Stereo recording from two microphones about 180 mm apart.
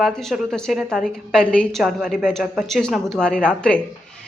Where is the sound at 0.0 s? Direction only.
Centre (ahead or behind).